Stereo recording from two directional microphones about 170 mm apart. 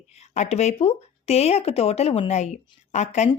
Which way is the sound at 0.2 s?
40° left (ahead or behind).